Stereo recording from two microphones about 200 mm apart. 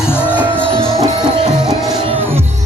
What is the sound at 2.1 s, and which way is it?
Music, 10° right (ahead or behind).